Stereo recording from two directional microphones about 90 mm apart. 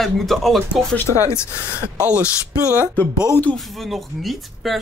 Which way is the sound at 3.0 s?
20° left (ahead or behind).